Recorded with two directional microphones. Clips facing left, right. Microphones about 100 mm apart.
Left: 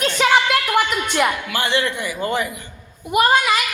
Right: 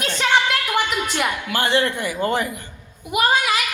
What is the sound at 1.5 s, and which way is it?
Speech, 40° right (ahead or behind).